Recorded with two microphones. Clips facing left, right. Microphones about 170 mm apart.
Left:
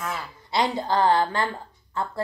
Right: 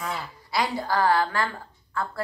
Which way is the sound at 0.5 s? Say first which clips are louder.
Left 2 dB; 20° left (ahead or behind).